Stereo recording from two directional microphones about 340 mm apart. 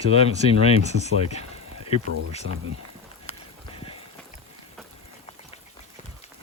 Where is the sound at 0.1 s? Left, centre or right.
Centre.